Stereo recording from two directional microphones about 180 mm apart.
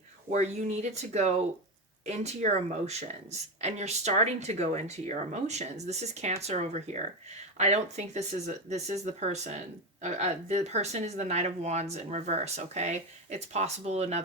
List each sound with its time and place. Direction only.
0.3 s speech: 40° right (ahead or behind)